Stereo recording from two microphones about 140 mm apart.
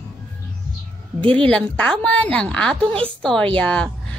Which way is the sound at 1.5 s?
5° left (ahead or behind).